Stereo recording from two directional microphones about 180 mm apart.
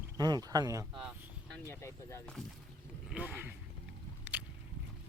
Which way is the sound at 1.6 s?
15° left (ahead or behind).